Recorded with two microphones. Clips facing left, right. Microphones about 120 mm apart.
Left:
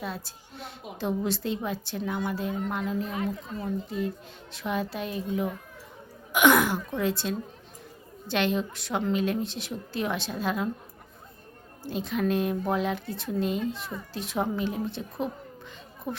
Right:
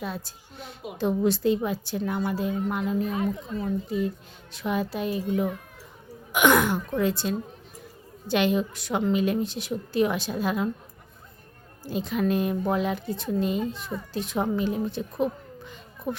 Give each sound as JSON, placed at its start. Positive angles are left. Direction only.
{"t": 0.0, "sound": "a woman's voice", "side_deg": 0}
{"t": 6.3, "sound": "a woman's voice", "side_deg": 0}
{"t": 11.9, "sound": "a woman's voice", "side_deg": 0}
{"t": 16.1, "sound": "speech", "side_deg": -55}